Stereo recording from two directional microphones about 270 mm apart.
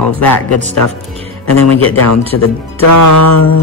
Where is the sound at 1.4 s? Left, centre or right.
Left.